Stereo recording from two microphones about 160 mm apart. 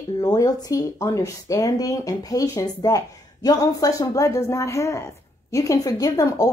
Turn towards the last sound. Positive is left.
turn(degrees=25)  # may be behind; listen again after turning